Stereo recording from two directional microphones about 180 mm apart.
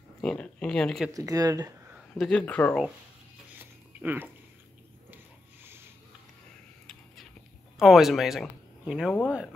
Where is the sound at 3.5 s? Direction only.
10° right (ahead or behind).